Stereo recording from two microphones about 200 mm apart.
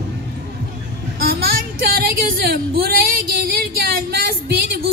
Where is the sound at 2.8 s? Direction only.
50° right (ahead or behind).